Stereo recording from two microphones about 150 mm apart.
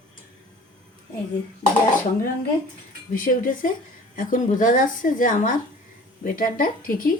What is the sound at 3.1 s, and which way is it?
A woman's voice, 65° left (ahead or behind).